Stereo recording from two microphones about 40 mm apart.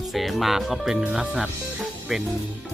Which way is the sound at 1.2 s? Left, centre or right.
Right.